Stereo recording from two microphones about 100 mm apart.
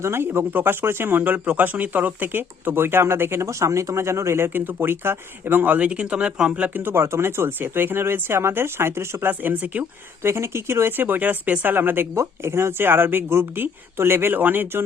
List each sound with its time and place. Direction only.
0.0 s speech: 25° right (ahead or behind)
10.2 s speech: 25° right (ahead or behind)